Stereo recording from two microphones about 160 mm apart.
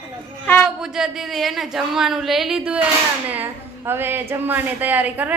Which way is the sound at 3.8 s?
15° right (ahead or behind).